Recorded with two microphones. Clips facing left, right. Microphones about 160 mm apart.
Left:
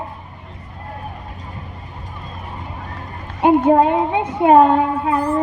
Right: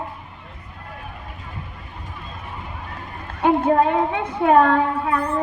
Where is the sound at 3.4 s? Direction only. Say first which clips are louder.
Left 4 dB; 20° left (ahead or behind).